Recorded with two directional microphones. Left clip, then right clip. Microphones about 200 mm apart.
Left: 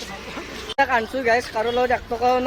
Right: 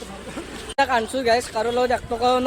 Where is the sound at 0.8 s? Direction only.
15° right (ahead or behind).